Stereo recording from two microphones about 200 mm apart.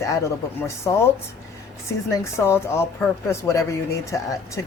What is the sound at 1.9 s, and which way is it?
Speech, 15° left (ahead or behind).